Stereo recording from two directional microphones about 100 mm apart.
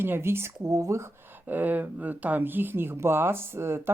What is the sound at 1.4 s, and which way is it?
Speech, 15° right (ahead or behind).